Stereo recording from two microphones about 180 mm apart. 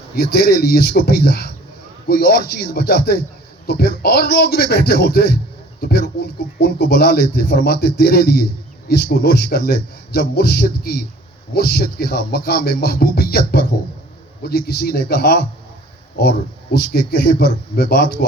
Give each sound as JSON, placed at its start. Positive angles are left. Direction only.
{"t": 0.2, "sound": "speech", "side_deg": 60}
{"t": 6.6, "sound": "speech", "side_deg": 60}
{"t": 16.7, "sound": "speech", "side_deg": 60}